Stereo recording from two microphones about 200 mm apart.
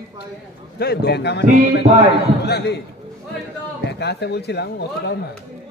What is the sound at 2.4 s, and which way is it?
Speech, 55° left (ahead or behind).